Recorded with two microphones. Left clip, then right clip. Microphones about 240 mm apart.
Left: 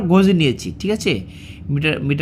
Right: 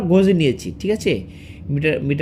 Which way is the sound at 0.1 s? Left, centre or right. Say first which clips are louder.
Even; left.